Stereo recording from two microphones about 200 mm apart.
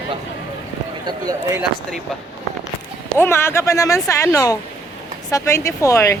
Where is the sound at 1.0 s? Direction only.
20° right (ahead or behind).